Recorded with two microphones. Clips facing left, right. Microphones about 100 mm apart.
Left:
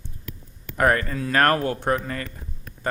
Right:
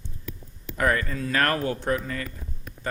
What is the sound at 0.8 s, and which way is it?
Speech, 55° left (ahead or behind).